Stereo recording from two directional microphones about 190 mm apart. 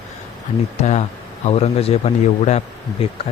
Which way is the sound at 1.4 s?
35° left (ahead or behind).